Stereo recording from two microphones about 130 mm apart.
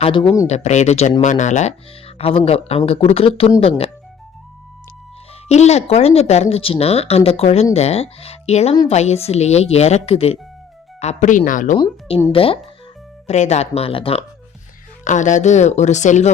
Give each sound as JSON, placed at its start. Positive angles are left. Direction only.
{"t": 0.0, "sound": "speech", "side_deg": 45}
{"t": 0.4, "sound": "a woman's voice", "side_deg": 60}
{"t": 2.1, "sound": "speech", "side_deg": 50}
{"t": 5.5, "sound": "a woman's voice", "side_deg": 55}
{"t": 11.0, "sound": "speech", "side_deg": 65}
{"t": 12.3, "sound": "speech", "side_deg": 45}
{"t": 13.2, "sound": "a woman's voice", "side_deg": 60}
{"t": 15.0, "sound": "speech", "side_deg": 70}